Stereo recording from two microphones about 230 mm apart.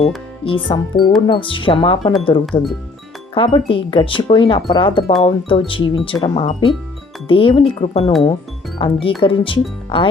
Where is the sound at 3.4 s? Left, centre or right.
Left.